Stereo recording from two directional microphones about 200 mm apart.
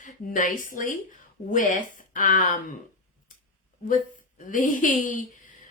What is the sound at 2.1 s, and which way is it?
Speech, 40° left (ahead or behind).